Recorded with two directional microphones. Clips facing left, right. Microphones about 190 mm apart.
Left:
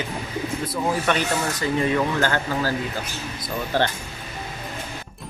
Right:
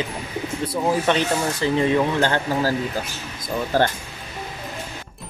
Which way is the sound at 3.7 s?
45° right (ahead or behind).